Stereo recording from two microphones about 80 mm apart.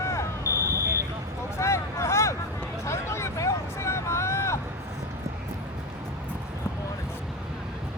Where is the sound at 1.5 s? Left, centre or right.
Left.